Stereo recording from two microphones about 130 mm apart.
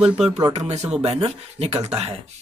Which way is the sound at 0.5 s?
60° right (ahead or behind).